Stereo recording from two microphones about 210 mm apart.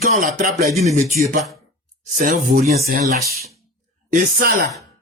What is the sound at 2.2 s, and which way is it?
Speech, 40° right (ahead or behind).